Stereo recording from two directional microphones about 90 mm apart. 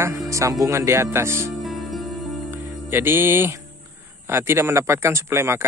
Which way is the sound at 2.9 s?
25° right (ahead or behind).